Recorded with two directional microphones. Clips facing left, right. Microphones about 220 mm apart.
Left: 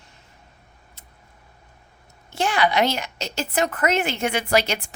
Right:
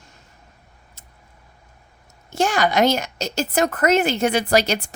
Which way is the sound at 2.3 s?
45° right (ahead or behind).